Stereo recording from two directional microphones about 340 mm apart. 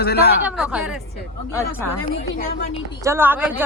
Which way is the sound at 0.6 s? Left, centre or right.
Centre.